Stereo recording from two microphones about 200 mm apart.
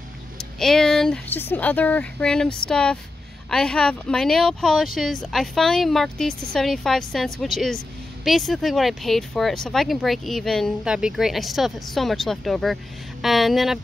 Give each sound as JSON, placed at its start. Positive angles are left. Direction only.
{"t": 0.4, "sound": "speech", "side_deg": 0}